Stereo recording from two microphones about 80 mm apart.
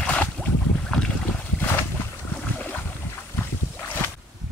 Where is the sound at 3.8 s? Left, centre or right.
Left.